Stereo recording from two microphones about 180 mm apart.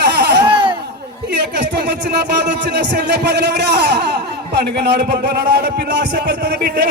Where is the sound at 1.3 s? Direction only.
70° right (ahead or behind).